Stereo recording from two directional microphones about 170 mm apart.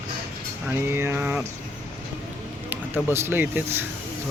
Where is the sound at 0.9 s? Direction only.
15° right (ahead or behind).